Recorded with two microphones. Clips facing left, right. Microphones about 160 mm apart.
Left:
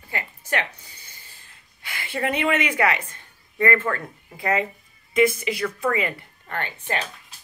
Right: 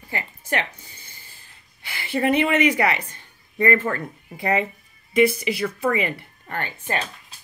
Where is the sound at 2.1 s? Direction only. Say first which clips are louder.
Right 4 dB; 25° right (ahead or behind).